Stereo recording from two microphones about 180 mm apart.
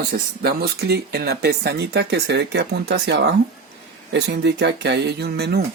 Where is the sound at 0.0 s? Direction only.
60° right (ahead or behind).